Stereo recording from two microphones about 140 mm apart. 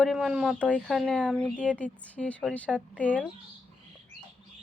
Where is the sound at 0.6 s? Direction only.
10° left (ahead or behind).